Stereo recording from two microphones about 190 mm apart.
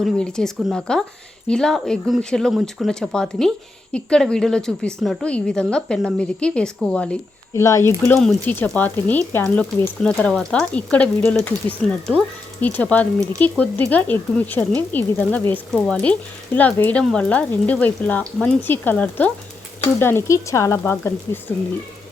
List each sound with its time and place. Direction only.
0.0 s a woman's voice: 5° left (ahead or behind)
7.5 s speech: 15° left (ahead or behind)